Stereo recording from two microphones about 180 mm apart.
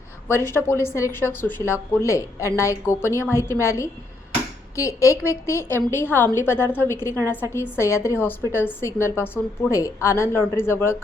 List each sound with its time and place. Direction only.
0.3 s a woman's voice: 15° left (ahead or behind)